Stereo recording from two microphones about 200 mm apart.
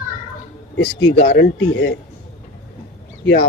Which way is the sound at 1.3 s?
55° left (ahead or behind).